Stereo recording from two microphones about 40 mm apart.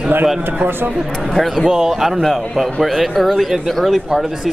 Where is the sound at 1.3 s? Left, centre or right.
Centre.